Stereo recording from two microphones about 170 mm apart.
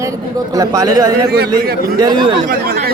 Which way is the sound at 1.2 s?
70° right (ahead or behind).